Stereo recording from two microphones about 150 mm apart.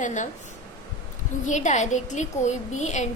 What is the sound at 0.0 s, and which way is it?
Speech, 55° left (ahead or behind).